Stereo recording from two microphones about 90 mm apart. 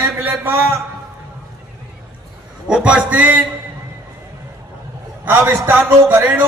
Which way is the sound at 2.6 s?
10° right (ahead or behind).